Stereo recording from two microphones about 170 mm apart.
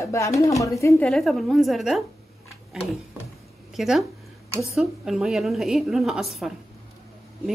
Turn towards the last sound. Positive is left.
turn(degrees=0)  # may be behind; listen again after turning